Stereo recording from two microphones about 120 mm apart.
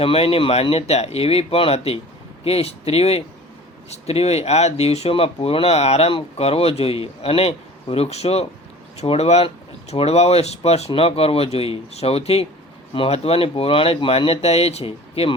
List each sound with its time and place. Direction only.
0.0 s speech: 50° left (ahead or behind)